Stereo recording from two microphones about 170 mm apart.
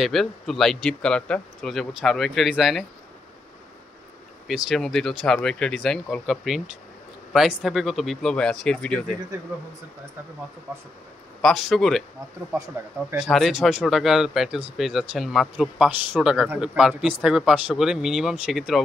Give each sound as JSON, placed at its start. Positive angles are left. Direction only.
{"t": 0.0, "sound": "speech", "side_deg": 0}
{"t": 4.6, "sound": "speech", "side_deg": 0}
{"t": 11.4, "sound": "speech", "side_deg": 0}
{"t": 12.5, "sound": "speech", "side_deg": -15}
{"t": 13.1, "sound": "speech", "side_deg": 0}